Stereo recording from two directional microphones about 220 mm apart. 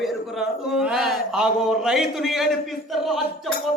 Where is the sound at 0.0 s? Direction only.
Centre (ahead or behind).